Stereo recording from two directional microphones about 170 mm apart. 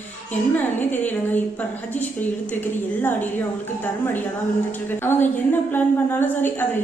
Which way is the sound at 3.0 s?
10° left (ahead or behind).